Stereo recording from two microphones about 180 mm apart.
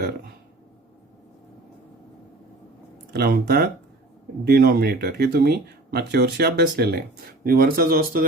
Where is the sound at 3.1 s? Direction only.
60° right (ahead or behind).